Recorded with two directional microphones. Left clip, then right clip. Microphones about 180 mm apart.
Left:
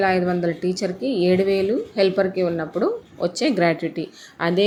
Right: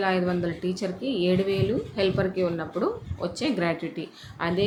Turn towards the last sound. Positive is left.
turn(degrees=30)  # may be behind; listen again after turning